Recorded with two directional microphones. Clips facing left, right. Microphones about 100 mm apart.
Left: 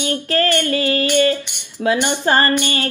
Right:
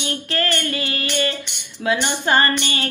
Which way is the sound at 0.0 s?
35° left (ahead or behind).